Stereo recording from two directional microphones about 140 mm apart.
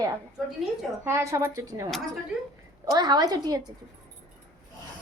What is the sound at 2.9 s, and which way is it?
Speech, 30° right (ahead or behind).